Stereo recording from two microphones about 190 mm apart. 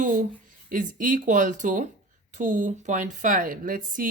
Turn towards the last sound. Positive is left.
turn(degrees=-45)  # may be behind; listen again after turning